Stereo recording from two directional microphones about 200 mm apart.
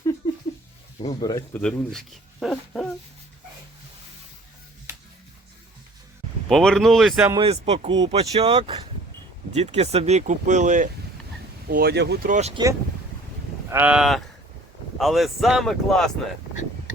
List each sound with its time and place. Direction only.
0.2 s a sound: 20° left (ahead or behind)
1.2 s speech: 20° left (ahead or behind)
1.5 s speech: 5° left (ahead or behind)
6.5 s speech: 5° left (ahead or behind)
7.3 s speech: 25° right (ahead or behind)
11.7 s speech: 50° right (ahead or behind)
12.3 s speech: 35° right (ahead or behind)
13.7 s speech: 10° right (ahead or behind)